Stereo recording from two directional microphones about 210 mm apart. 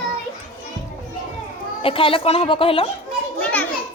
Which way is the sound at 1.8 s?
25° left (ahead or behind).